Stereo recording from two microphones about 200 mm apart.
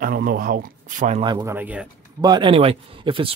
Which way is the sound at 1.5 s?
10° right (ahead or behind).